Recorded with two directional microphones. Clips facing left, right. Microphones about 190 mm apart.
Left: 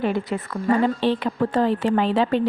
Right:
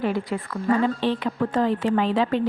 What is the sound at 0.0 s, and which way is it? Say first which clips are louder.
A woman's voice: left 1 dB; 25° left (ahead or behind).